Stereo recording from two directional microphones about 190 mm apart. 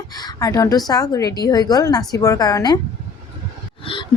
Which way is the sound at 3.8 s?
25° left (ahead or behind).